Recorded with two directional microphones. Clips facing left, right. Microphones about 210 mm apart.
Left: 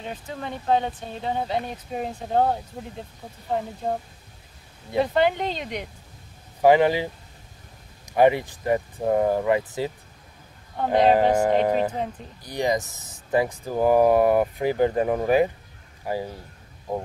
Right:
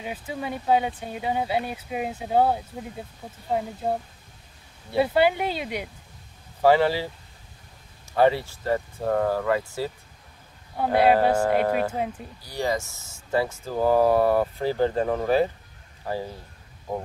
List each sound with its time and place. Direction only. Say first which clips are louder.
0.0 s speech: right 1 dB; 10° right (ahead or behind)
4.9 s speech: even; 10° right (ahead or behind)
6.6 s speech: left 2 dB; 15° left (ahead or behind)
10.8 s speech: even; 10° right (ahead or behind)
11.1 s speech: left 2 dB; 15° left (ahead or behind)